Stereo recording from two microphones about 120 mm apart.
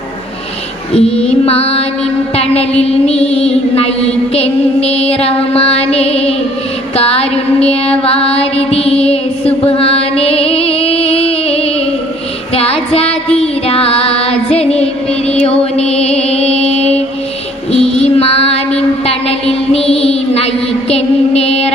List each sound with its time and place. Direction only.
0.9 s mantra: 55° left (ahead or behind)
6.9 s music: 55° left (ahead or behind)
12.5 s child singing: 55° left (ahead or behind)
13.3 s music: 55° left (ahead or behind)
17.7 s child singing: 60° left (ahead or behind)
20.9 s mantra: 60° left (ahead or behind)